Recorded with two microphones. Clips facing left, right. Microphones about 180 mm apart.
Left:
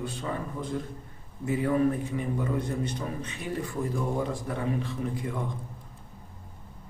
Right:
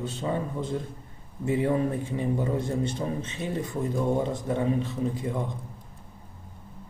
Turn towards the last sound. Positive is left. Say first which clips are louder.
# right 3 dB
turn(degrees=-20)  # may be behind; listen again after turning